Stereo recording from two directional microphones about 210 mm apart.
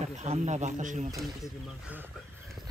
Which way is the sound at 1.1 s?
Centre (ahead or behind).